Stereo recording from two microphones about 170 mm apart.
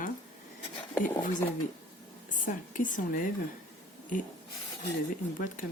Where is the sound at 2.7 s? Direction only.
50° left (ahead or behind).